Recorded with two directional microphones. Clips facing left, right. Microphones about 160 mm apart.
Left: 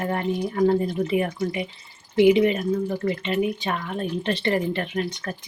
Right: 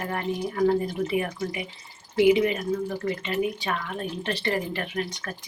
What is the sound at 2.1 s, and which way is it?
Speech, 25° left (ahead or behind).